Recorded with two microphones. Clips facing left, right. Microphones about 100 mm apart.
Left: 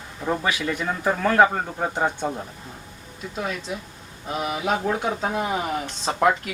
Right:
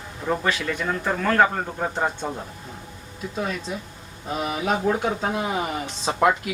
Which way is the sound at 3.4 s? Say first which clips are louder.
Right 1 dB; centre (ahead or behind).